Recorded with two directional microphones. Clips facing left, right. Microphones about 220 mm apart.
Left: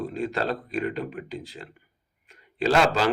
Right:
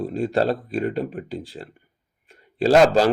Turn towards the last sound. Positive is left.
turn(degrees=-40)  # may be behind; listen again after turning